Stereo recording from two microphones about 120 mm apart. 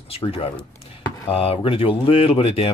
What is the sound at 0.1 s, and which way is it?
Speech, 55° left (ahead or behind).